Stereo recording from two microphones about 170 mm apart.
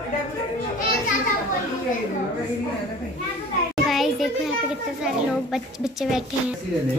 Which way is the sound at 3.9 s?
Centre (ahead or behind).